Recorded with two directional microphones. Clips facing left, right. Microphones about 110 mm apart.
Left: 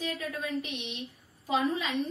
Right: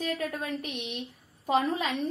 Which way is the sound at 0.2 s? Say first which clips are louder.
Right 1 dB; 50° right (ahead or behind).